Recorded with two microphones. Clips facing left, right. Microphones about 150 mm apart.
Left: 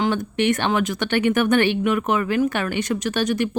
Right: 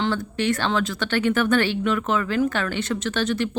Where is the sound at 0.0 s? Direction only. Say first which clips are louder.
Left 3 dB; 20° left (ahead or behind).